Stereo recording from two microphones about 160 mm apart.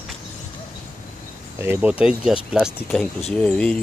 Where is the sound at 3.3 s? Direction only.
5° left (ahead or behind).